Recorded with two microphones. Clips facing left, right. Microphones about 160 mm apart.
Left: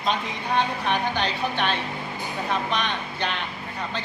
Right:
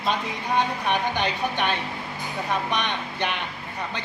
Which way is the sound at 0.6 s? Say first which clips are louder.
Even; 15° right (ahead or behind).